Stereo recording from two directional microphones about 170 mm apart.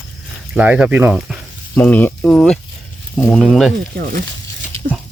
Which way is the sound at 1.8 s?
10° left (ahead or behind).